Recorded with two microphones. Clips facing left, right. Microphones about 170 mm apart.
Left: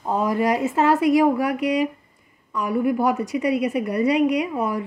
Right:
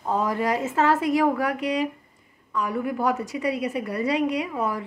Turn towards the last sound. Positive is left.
turn(degrees=15)  # may be behind; listen again after turning